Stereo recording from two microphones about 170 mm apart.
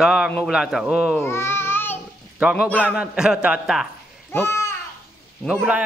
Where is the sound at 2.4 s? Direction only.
5° right (ahead or behind).